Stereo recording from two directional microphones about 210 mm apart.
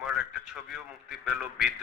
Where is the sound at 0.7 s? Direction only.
Centre (ahead or behind).